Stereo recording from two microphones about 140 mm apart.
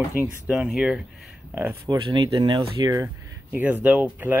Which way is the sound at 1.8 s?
30° right (ahead or behind).